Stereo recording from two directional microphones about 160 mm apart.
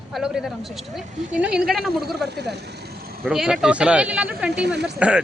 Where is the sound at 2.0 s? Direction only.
90° right.